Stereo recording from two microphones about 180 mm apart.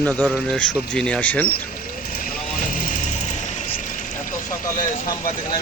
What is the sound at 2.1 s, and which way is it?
Vehicle, 50° left (ahead or behind).